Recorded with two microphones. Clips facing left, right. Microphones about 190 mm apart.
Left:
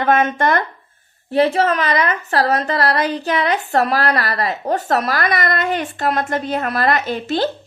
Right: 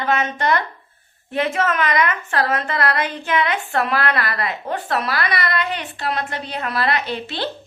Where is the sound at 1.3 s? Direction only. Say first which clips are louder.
Left 5 dB; 35° left (ahead or behind).